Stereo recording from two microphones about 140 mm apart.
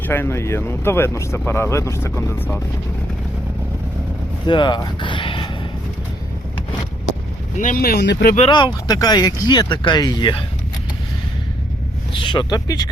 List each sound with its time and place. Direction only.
0.1 s speech: 15° left (ahead or behind)
4.4 s speech: 35° left (ahead or behind)
7.6 s speech: 80° left
8.4 s speech: 35° left (ahead or behind)
12.2 s speech: 30° left (ahead or behind)